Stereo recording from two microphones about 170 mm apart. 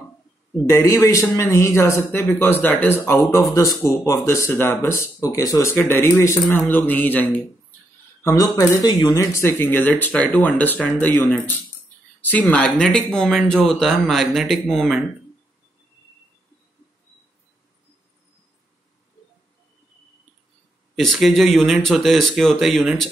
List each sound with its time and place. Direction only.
0.7 s a man's voice: 20° left (ahead or behind); by 15.0 s centre (ahead or behind)
20.9 s speech: centre (ahead or behind)